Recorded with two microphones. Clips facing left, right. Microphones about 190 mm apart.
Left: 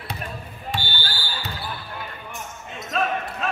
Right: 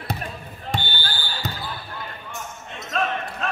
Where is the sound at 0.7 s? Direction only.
50° right (ahead or behind).